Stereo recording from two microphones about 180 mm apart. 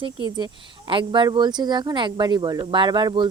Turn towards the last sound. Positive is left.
turn(degrees=-25)  # may be behind; listen again after turning